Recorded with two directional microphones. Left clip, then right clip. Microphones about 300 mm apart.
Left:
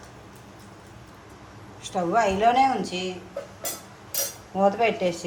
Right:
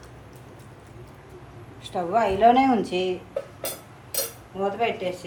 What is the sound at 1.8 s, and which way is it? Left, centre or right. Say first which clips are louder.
Speech: even; centre.